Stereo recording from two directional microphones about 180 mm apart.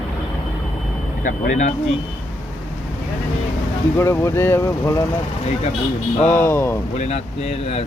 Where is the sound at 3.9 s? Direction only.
15° left (ahead or behind).